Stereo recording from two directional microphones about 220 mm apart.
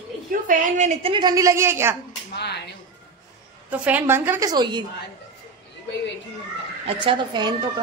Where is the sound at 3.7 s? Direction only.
10° right (ahead or behind).